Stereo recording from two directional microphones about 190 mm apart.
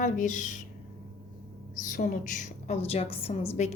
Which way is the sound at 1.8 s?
45° left (ahead or behind).